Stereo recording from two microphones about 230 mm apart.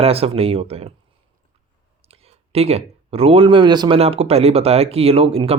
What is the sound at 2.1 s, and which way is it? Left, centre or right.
Speech, right.